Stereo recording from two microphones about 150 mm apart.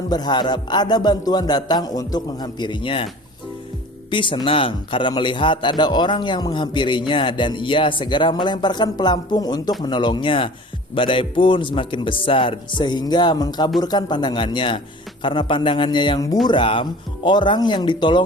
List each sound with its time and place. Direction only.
0.1 s speech: 30° left (ahead or behind)
4.1 s a man's voice: 35° left (ahead or behind)